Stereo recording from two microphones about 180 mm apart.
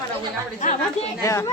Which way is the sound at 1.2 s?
15° left (ahead or behind).